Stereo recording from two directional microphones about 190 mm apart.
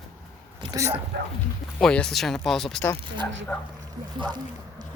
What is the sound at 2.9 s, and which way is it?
Speech, 25° right (ahead or behind).